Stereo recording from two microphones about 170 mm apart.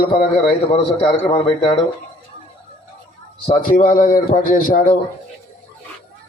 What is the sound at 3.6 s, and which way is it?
A man's voice, 55° left (ahead or behind).